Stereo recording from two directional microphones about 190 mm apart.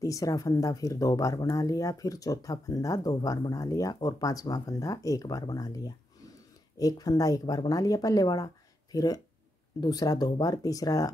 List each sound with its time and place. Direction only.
0.0 s speech: 15° left (ahead or behind)